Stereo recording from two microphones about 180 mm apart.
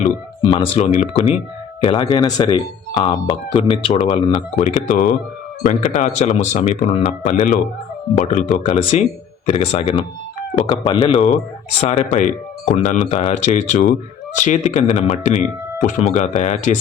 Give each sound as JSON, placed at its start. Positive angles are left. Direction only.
{"t": 0.4, "sound": "speech", "side_deg": 30}